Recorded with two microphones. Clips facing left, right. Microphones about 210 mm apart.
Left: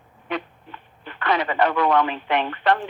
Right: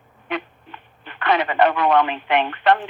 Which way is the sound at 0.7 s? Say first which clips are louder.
Left 1 dB; 65° right (ahead or behind).